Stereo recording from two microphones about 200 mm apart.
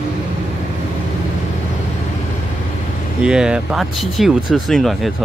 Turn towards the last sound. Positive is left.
turn(degrees=0)  # may be behind; listen again after turning